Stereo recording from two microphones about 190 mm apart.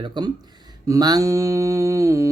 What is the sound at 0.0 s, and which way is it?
Mantra, 25° right (ahead or behind).